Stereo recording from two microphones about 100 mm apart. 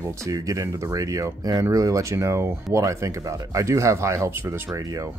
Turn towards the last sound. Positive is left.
turn(degrees=-25)  # may be behind; listen again after turning